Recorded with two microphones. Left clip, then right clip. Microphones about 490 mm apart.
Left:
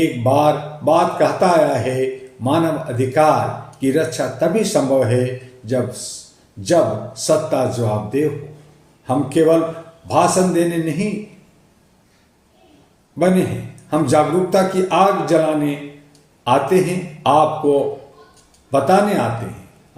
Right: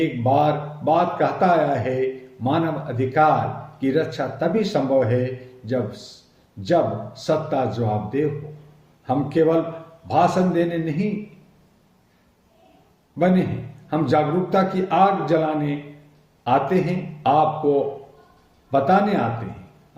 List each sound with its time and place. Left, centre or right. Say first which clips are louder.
0.2 s speech: left 3 dB; right
13.1 s a man's voice: left 4 dB; right